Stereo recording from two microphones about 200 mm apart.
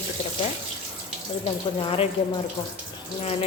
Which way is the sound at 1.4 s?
30° left (ahead or behind).